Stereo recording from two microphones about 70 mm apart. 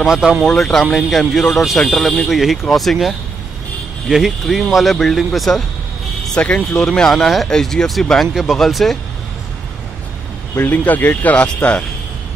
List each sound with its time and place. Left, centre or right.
0.0 s speech: centre
0.6 s speech: centre
6.2 s speech: centre
10.5 s speech: left